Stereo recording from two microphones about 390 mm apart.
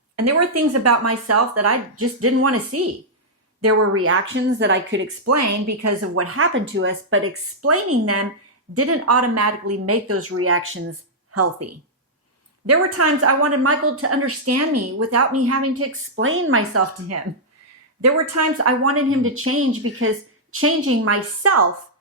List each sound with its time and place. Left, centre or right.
0.2 s a woman's voice: right